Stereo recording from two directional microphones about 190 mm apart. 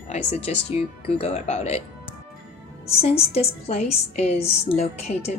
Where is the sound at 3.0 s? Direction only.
35° left (ahead or behind).